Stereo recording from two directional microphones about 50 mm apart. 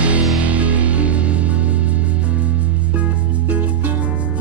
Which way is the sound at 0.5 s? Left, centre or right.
Right.